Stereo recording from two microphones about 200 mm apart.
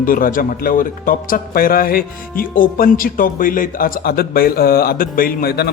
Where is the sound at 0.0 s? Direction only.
45° left (ahead or behind).